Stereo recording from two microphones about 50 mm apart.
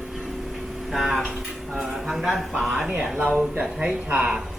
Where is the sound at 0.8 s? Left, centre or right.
Centre.